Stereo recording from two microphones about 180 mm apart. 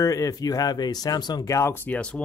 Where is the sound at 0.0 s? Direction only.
20° left (ahead or behind).